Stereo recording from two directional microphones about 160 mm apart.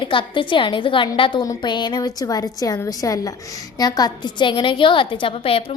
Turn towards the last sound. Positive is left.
turn(degrees=35)  # may be behind; listen again after turning